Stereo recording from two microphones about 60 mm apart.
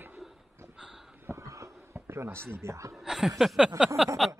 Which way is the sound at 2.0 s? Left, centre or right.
Right.